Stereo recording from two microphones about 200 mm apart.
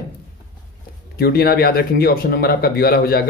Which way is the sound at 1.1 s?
50° left (ahead or behind).